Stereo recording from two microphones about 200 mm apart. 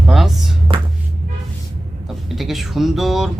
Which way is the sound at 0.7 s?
15° right (ahead or behind).